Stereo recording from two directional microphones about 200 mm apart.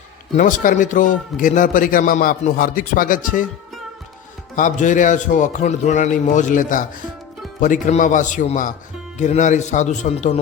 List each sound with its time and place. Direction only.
0.3 s a man's voice: 40° left (ahead or behind)
4.5 s a man's voice: 40° left (ahead or behind)